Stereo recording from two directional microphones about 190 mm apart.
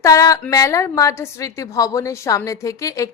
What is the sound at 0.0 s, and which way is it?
A woman's voice, 20° left (ahead or behind).